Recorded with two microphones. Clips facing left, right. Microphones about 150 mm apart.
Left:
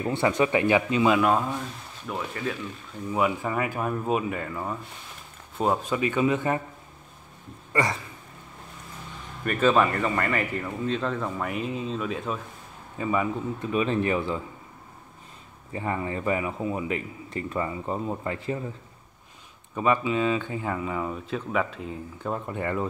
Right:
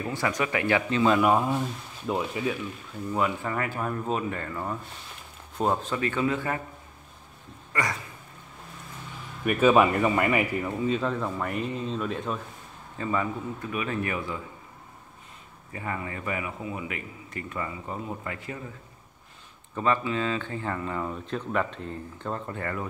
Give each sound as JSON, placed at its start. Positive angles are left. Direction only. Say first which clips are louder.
{"t": 0.1, "sound": "a man's voice", "louder": "left 6 dB", "side_deg": 25}
{"t": 1.1, "sound": "speech", "louder": "right 1 dB", "side_deg": -5}
{"t": 3.1, "sound": "speech", "louder": "left 2 dB", "side_deg": 10}
{"t": 9.4, "sound": "speech", "louder": "right 2 dB", "side_deg": -10}
{"t": 12.9, "sound": "speech", "louder": "left 2 dB", "side_deg": 15}
{"t": 13.7, "sound": "a man's voice", "louder": "left 6 dB", "side_deg": 25}
{"t": 15.7, "sound": "a man's voice", "louder": "left 5 dB", "side_deg": 30}
{"t": 19.7, "sound": "speech", "louder": "left 2 dB", "side_deg": 15}